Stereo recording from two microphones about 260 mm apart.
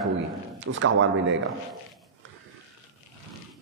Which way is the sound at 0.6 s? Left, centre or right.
Right.